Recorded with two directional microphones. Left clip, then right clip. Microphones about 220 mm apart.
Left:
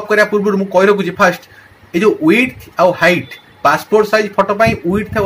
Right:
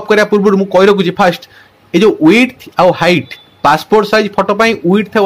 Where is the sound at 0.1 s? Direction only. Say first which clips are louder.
Right 3 dB; 45° right (ahead or behind).